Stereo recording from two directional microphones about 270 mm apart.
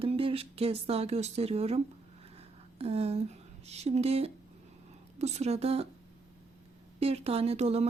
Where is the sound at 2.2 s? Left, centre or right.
Right.